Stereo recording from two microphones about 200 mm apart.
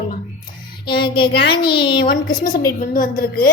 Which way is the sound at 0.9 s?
25° left (ahead or behind).